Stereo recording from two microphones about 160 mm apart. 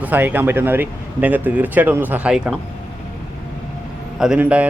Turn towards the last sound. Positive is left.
turn(degrees=-10)  # may be behind; listen again after turning